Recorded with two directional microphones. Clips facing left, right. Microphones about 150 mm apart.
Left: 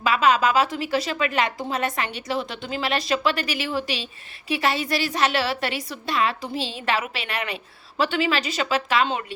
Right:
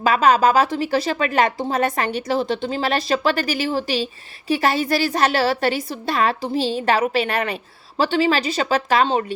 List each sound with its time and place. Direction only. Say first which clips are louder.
0.0 s speech: right 4 dB; 40° right (ahead or behind)